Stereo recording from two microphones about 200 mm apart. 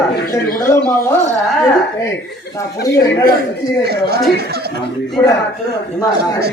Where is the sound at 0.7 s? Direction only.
10° left (ahead or behind).